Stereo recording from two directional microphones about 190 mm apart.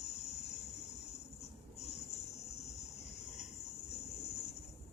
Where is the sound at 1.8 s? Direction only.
35° left (ahead or behind).